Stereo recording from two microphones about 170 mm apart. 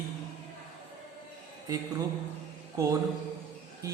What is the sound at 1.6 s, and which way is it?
Speech, 20° right (ahead or behind).